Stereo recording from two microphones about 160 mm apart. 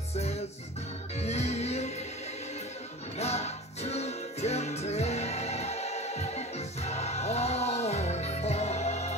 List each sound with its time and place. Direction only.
0.1 s music: 40° left (ahead or behind)
3.2 s music: 40° left (ahead or behind)